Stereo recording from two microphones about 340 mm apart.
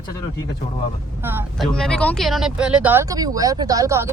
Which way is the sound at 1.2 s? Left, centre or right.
Centre.